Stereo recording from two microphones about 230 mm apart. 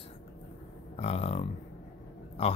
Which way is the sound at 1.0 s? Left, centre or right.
Left.